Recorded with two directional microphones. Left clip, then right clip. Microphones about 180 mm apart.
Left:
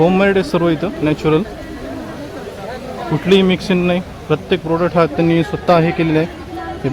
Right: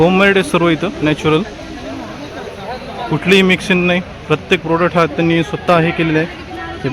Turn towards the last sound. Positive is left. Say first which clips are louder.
# right 1 dB
turn(degrees=10)  # may be behind; listen again after turning